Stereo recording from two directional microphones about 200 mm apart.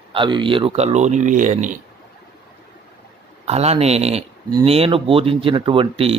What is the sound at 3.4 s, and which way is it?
Speech, 30° right (ahead or behind).